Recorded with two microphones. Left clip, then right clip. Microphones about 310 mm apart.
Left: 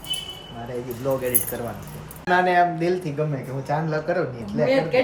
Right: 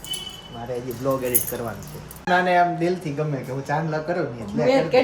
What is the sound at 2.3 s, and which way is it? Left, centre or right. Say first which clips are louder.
Speech: even; centre.